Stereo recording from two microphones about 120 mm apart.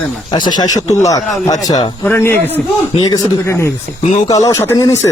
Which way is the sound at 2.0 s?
20° left (ahead or behind).